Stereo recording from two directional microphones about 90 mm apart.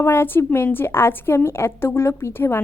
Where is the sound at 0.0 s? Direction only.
25° left (ahead or behind).